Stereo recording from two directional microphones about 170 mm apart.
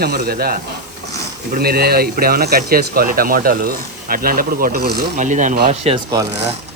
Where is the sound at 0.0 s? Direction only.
65° right (ahead or behind).